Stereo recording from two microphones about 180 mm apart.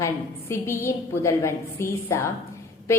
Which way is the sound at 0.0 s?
15° left (ahead or behind).